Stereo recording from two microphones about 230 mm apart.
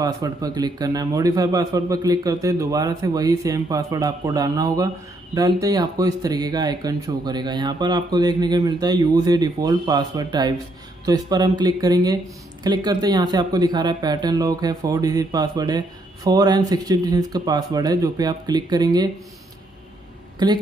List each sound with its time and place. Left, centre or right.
0.0 s a man's voice: centre
20.4 s speech: centre